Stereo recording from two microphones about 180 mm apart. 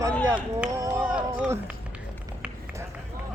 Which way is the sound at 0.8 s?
10° right (ahead or behind).